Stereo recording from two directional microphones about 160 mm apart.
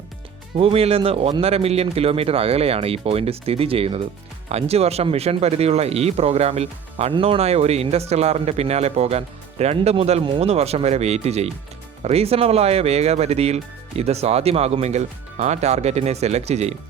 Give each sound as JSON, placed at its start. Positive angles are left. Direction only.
{"t": 0.5, "sound": "speech", "side_deg": -40}